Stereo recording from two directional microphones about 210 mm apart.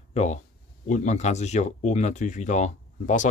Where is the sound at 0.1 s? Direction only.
35° left (ahead or behind).